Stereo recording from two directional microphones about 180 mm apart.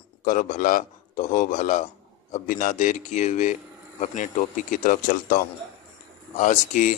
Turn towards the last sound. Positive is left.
turn(degrees=45)  # may be behind; listen again after turning